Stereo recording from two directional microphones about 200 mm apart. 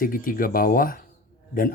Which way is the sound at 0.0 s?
45° left (ahead or behind).